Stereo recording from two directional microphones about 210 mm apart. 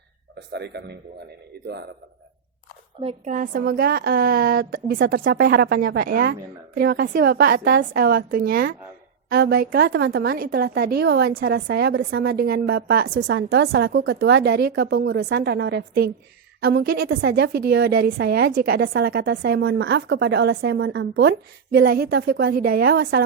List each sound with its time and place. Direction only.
0.3 s a man's voice: 50° right (ahead or behind)
3.0 s a woman's voice: 30° right (ahead or behind); by 23.2 s 50° right (ahead or behind)